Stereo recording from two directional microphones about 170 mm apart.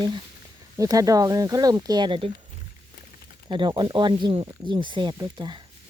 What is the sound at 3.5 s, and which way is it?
Speech, 25° right (ahead or behind).